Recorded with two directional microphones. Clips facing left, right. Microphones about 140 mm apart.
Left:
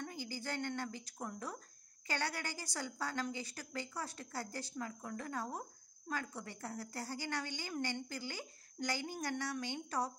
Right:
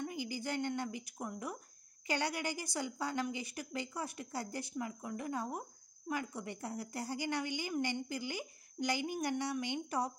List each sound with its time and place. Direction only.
0.0 s a woman's voice: 15° right (ahead or behind)